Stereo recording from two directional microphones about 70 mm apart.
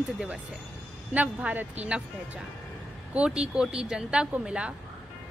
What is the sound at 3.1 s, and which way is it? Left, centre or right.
Speech, centre.